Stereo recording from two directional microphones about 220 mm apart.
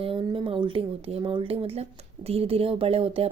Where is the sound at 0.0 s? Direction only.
25° right (ahead or behind).